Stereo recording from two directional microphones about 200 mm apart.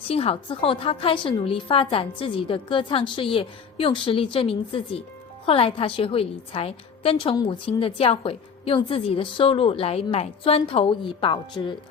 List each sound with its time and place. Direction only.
0.1 s a woman's voice: 30° left (ahead or behind)